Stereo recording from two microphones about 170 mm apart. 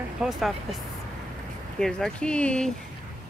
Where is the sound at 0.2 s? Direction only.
Centre (ahead or behind).